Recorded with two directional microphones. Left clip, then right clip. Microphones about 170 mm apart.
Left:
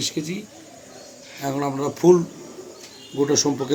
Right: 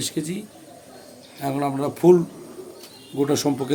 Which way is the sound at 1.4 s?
10° right (ahead or behind).